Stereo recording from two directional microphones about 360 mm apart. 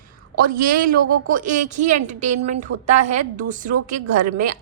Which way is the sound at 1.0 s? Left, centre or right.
Right.